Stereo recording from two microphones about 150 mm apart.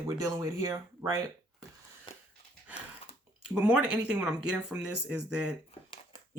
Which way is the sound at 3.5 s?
10° right (ahead or behind).